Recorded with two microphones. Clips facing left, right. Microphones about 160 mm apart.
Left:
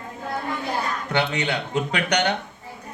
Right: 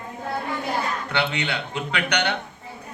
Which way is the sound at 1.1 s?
40° left (ahead or behind).